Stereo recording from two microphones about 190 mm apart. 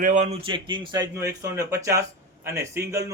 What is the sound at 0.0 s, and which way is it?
Speech, 40° right (ahead or behind).